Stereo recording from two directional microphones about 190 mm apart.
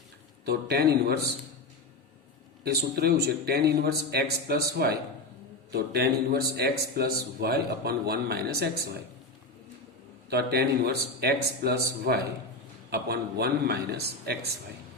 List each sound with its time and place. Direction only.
0.4 s a man's voice: 55° right (ahead or behind)
2.6 s a man's voice: 60° right (ahead or behind)
10.2 s a man's voice: 55° right (ahead or behind)